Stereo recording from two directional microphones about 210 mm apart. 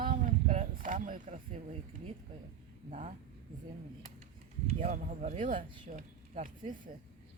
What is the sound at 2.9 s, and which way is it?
Speech, 35° right (ahead or behind).